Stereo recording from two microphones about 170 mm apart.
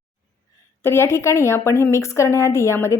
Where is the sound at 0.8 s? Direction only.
15° left (ahead or behind).